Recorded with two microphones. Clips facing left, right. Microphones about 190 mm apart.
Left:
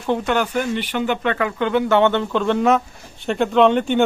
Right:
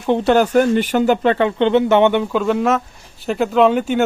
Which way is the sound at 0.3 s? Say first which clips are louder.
Right 7 dB; 40° right (ahead or behind).